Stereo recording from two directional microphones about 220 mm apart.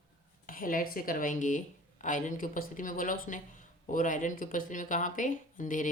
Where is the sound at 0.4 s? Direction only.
40° left (ahead or behind).